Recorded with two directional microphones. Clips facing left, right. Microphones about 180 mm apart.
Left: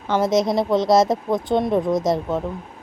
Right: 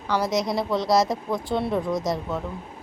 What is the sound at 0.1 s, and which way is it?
A woman's voice, 25° left (ahead or behind).